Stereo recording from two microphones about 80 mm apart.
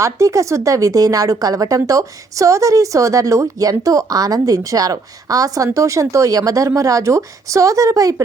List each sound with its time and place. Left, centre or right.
0.0 s speech: right